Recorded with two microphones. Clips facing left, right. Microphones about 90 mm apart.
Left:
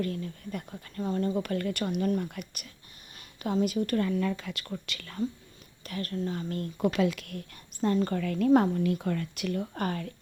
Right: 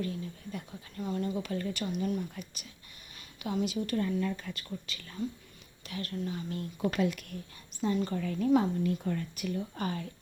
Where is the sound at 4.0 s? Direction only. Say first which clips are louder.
Left 3 dB; 80° left.